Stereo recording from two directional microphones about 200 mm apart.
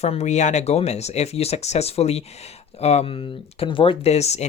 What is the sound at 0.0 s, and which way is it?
Speech, 35° left (ahead or behind).